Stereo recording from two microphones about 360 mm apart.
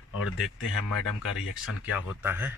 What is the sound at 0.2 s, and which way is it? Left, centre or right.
Speech, left.